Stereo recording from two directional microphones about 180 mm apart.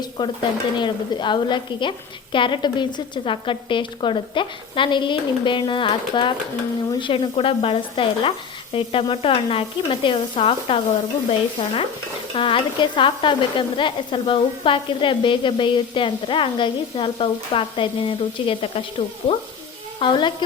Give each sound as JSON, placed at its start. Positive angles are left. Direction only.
{"t": 0.2, "sound": "speech", "side_deg": 25}